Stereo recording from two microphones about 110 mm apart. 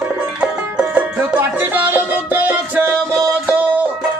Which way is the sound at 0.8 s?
15° right (ahead or behind).